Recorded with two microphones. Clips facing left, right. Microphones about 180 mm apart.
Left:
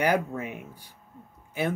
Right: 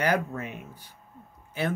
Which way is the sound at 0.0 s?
15° left (ahead or behind).